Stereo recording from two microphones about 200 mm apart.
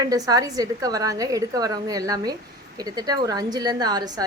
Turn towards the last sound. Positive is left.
turn(degrees=-20)  # may be behind; listen again after turning